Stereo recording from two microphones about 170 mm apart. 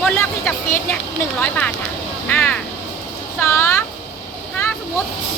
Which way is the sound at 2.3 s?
10° left (ahead or behind).